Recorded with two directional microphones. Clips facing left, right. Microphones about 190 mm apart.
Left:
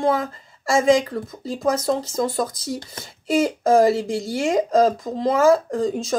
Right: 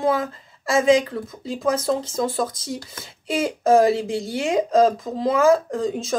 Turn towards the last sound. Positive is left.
turn(degrees=0)  # may be behind; listen again after turning